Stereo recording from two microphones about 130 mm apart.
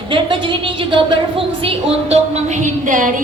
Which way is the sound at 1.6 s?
55° right (ahead or behind).